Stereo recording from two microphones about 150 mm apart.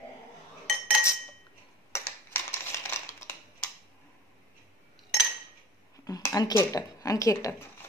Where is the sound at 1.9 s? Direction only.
15° left (ahead or behind).